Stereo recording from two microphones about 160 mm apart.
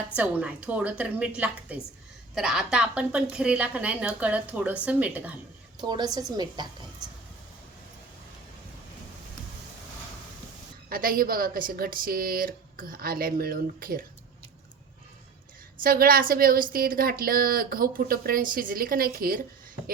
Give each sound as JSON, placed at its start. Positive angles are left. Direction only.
{"t": 0.2, "sound": "a woman's voice", "side_deg": -10}
{"t": 5.8, "sound": "a woman's voice", "side_deg": -25}
{"t": 10.8, "sound": "a woman's voice", "side_deg": -65}
{"t": 15.8, "sound": "a woman's voice", "side_deg": -65}